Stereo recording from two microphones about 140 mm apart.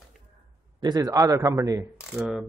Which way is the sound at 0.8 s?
25° right (ahead or behind).